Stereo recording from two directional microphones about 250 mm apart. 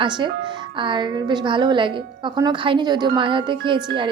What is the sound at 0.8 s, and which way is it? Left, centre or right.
A woman's voice, centre.